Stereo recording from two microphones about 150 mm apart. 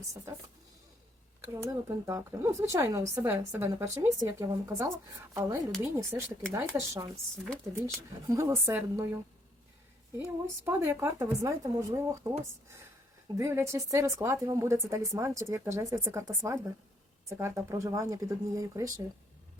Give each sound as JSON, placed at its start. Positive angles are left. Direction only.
{"t": 1.6, "sound": "a woman's voice", "side_deg": -20}
{"t": 7.4, "sound": "speech", "side_deg": 5}
{"t": 8.3, "sound": "a woman's voice", "side_deg": -20}
{"t": 10.2, "sound": "speech", "side_deg": -15}
{"t": 13.3, "sound": "speech", "side_deg": -20}